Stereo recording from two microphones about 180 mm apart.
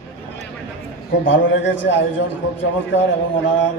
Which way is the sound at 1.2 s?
90° left.